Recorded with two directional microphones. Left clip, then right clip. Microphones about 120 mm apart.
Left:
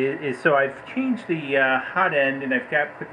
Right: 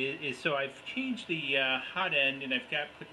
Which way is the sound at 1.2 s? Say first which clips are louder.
Left 7 dB; 45° left (ahead or behind).